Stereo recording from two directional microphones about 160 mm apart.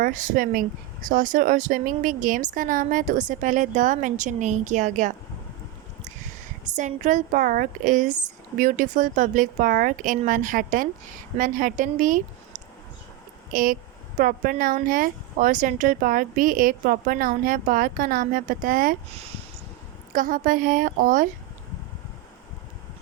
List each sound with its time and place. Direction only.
0.0 s speech: 60° right (ahead or behind)
6.7 s speech: 50° right (ahead or behind)
13.5 s speech: 60° right (ahead or behind)
20.1 s speech: 60° right (ahead or behind)